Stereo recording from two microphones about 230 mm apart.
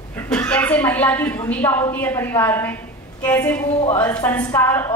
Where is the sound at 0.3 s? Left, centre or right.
Centre.